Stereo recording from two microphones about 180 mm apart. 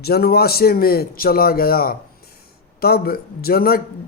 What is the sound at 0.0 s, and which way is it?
Speech, 60° left (ahead or behind).